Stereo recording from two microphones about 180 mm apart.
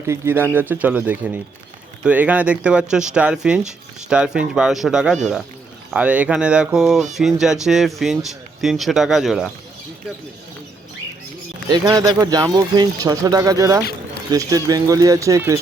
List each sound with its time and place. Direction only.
0.1 s speech: 15° right (ahead or behind)
11.7 s speech: 20° right (ahead or behind)